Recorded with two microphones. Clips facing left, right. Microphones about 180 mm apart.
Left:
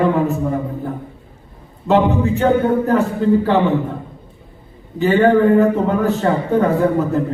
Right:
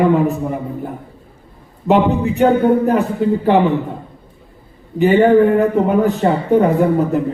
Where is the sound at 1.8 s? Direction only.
15° right (ahead or behind).